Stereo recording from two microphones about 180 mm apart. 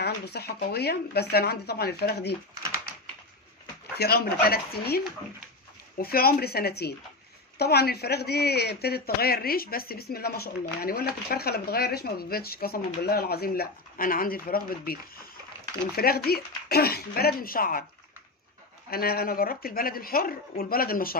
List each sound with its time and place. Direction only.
0.0 s speech: 65° left (ahead or behind)
3.9 s speech: 60° left (ahead or behind)
18.9 s speech: 55° left (ahead or behind)